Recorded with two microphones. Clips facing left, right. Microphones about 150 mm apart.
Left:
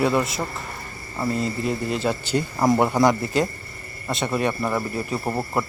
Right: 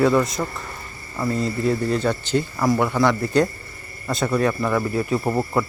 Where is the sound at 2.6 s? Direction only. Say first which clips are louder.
Left 2 dB; 20° left (ahead or behind).